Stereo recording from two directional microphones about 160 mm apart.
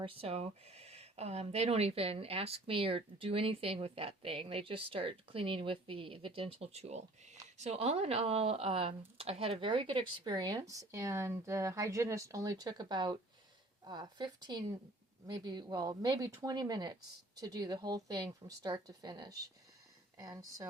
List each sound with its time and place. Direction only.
0.0 s speech: 35° right (ahead or behind); by 20.7 s 20° right (ahead or behind)